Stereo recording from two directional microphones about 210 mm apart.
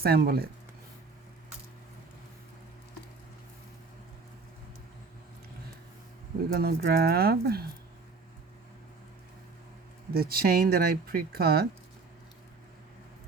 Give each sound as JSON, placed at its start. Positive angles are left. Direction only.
{"t": 0.0, "sound": "speech", "side_deg": -45}
{"t": 6.5, "sound": "speech", "side_deg": -45}
{"t": 10.2, "sound": "speech", "side_deg": -45}